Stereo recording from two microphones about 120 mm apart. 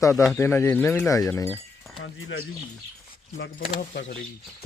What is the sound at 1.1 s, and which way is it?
Speech, 30° left (ahead or behind).